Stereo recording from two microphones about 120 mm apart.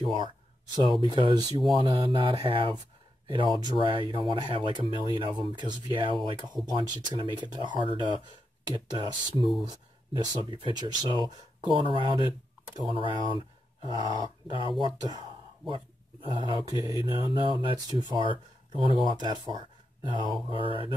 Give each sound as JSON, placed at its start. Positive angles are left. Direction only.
{"t": 0.0, "sound": "speech", "side_deg": -45}